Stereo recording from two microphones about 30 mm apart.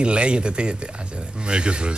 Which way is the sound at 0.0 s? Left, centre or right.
Right.